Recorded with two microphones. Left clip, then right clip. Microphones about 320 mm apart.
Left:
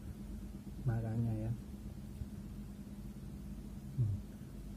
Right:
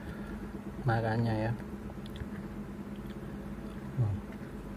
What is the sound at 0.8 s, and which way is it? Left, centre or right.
Speech, centre.